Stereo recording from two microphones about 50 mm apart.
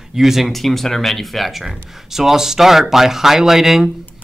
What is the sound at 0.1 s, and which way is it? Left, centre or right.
Speech, centre.